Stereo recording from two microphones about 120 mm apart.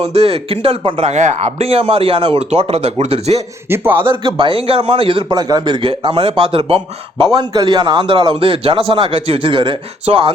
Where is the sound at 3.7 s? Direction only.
20° right (ahead or behind).